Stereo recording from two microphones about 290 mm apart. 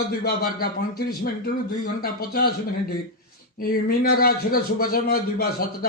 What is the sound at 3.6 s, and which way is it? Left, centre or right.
A man's voice, left.